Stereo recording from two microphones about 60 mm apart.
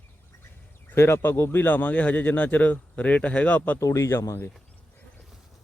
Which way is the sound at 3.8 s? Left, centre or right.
Left.